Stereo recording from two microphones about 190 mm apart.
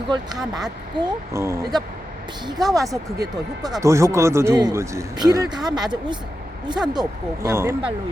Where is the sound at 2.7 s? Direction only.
15° right (ahead or behind).